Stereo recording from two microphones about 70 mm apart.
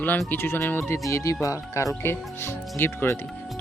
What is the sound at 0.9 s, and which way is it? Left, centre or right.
Speech, left.